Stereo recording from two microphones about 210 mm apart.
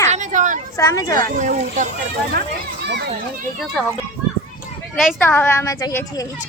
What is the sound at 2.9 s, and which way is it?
Speech, 55° right (ahead or behind).